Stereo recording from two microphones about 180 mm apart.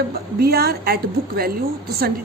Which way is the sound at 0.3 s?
60° right (ahead or behind).